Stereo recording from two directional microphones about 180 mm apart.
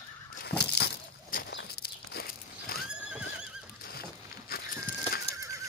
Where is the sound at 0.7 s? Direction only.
60° left (ahead or behind).